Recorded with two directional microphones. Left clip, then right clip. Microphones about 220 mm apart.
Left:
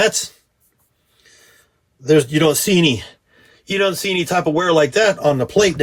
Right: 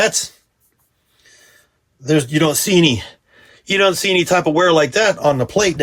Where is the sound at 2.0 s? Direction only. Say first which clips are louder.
Left 2 dB; 20° right (ahead or behind).